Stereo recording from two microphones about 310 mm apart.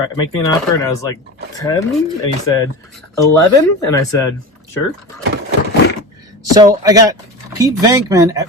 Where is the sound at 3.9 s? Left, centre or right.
Centre.